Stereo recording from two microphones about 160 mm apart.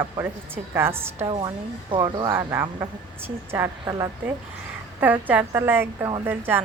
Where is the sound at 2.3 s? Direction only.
15° right (ahead or behind).